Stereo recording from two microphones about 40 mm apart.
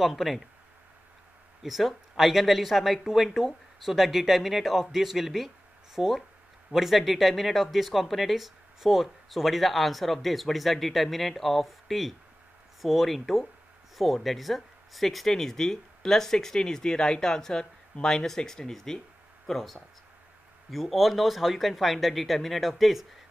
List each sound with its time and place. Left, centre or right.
0.0 s speech: centre
1.6 s speech: centre